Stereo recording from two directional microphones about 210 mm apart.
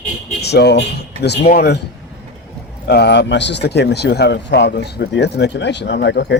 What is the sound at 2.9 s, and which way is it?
Speech, 50° left (ahead or behind).